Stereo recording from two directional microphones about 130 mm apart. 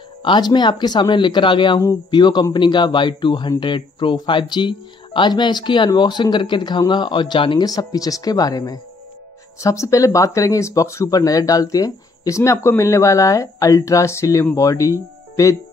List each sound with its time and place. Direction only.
0.2 s speech: 35° left (ahead or behind)
7.6 s speech: 30° left (ahead or behind)